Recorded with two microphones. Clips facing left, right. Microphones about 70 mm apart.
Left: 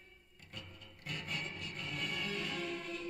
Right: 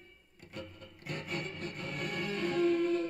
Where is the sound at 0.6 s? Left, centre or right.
Right.